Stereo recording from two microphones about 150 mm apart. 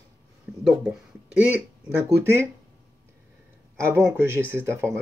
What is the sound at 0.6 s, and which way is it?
Speech, 5° right (ahead or behind).